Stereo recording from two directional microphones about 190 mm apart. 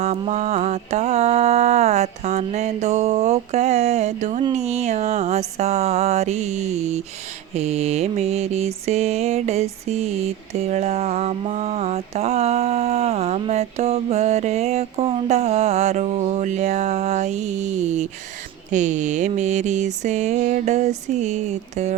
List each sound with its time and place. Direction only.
0.0 s mantra: 35° right (ahead or behind)